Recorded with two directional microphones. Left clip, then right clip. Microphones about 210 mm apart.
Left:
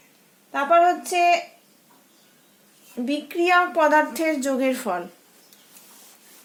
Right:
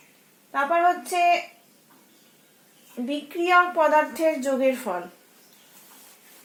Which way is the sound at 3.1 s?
45° left (ahead or behind).